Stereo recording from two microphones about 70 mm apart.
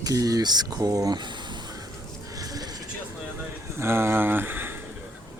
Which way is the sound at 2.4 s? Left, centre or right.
Right.